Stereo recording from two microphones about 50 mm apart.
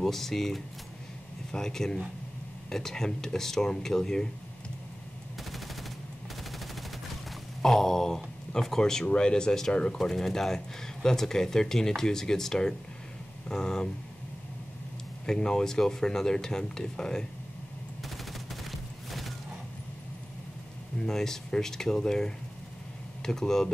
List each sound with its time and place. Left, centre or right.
0.0 s speech: centre
5.4 s machine gun: centre
7.6 s a sound: centre
9.0 s speech: centre
9.9 s speech: centre
15.2 s speech: centre
18.0 s fusillade: centre
21.0 s speech: centre